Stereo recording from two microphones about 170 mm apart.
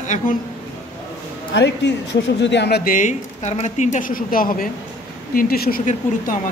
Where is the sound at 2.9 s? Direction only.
50° left (ahead or behind).